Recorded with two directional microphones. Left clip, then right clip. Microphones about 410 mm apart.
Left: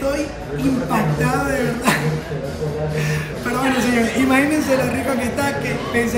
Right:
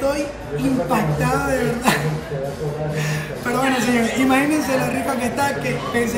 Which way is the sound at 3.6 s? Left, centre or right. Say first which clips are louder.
Left 2 dB; centre.